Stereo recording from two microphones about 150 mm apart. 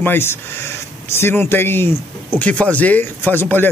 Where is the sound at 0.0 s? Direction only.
15° left (ahead or behind).